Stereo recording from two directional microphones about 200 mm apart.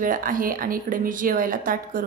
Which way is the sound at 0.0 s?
45° right (ahead or behind).